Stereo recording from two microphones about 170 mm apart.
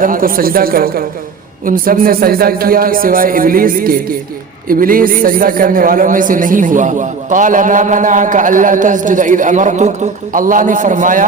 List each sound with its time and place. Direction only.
0.0 s a man's voice: 55° right (ahead or behind)